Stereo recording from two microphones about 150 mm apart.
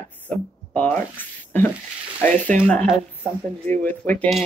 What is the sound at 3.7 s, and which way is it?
Speech, 10° left (ahead or behind).